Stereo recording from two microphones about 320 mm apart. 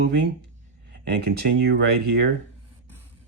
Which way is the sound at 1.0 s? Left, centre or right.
Right.